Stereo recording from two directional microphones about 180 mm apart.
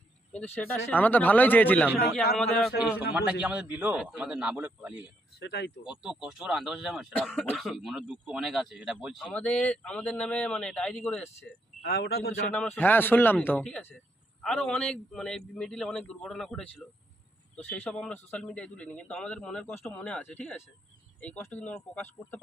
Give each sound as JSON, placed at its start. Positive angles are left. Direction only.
{"t": 0.3, "sound": "speech", "side_deg": 10}
{"t": 2.4, "sound": "speech", "side_deg": 0}
{"t": 5.4, "sound": "speech", "side_deg": 75}
{"t": 5.8, "sound": "speech", "side_deg": -5}
{"t": 11.8, "sound": "speech", "side_deg": 60}
{"t": 12.5, "sound": "speech", "side_deg": 10}